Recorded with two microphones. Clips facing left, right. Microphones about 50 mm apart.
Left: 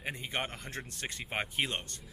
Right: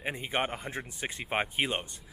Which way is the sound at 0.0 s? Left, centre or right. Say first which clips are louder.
Right 5 dB; centre.